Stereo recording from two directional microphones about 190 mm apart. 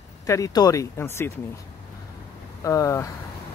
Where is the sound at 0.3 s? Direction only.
20° left (ahead or behind).